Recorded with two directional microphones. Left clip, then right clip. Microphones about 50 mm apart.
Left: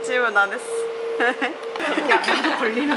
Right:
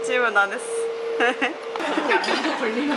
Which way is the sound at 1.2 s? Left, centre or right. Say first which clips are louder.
Even; centre.